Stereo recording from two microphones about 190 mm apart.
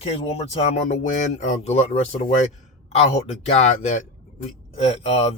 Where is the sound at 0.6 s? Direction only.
35° left (ahead or behind).